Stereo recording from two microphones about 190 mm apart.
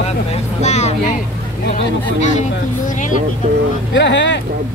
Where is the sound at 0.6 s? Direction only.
35° left (ahead or behind).